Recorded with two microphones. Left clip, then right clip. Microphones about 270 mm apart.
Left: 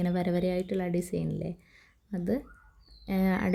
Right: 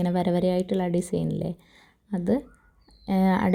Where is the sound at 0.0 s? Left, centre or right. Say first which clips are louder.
Right 5 dB; centre.